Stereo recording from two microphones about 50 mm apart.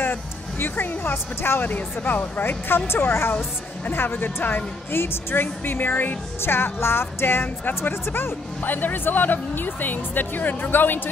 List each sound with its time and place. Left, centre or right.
0.0 s music: left
1.1 s speech: left
1.6 s speech: left
2.9 s a woman's voice: left